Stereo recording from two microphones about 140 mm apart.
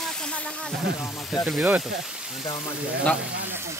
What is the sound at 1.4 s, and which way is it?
Speech, 10° right (ahead or behind).